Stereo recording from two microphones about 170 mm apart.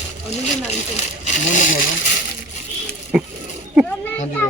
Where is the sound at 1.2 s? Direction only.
45° left (ahead or behind).